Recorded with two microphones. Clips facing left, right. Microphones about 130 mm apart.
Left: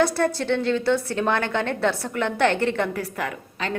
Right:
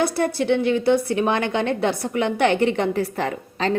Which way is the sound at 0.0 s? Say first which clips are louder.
Even; 15° right (ahead or behind).